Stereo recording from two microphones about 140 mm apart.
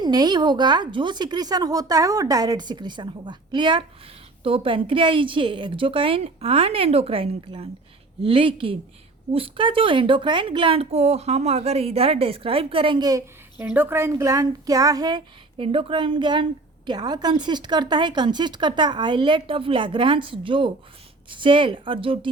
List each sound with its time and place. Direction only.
0.0 s a woman's voice: 30° right (ahead or behind)
13.6 s a woman's voice: 15° right (ahead or behind); by 22.3 s 40° right (ahead or behind)